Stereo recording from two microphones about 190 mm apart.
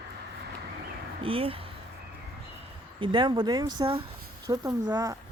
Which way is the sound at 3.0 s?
25° right (ahead or behind).